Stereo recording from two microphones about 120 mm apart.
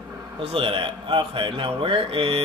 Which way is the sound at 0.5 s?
50° right (ahead or behind).